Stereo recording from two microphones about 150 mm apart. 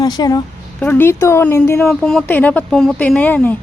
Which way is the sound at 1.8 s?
5° left (ahead or behind).